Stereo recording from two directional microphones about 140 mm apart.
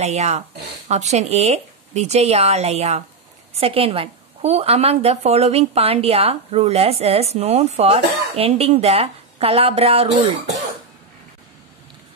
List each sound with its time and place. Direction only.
0.0 s a woman's voice: 50° right (ahead or behind)